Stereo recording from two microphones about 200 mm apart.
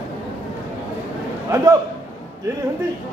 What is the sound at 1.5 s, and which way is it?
Speech, 15° right (ahead or behind).